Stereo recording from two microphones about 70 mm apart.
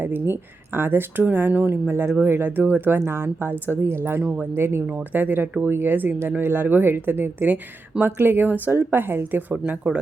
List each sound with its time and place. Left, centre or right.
0.0 s speech: right
4.2 s speech: centre
4.5 s speech: right
9.8 s speech: centre